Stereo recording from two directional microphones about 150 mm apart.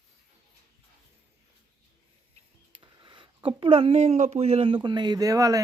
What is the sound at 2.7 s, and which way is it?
Speech, 35° right (ahead or behind).